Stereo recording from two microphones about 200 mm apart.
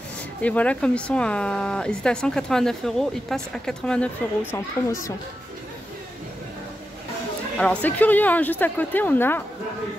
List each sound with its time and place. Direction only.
0.4 s speech: 5° left (ahead or behind)
7.5 s a woman's voice: 5° left (ahead or behind)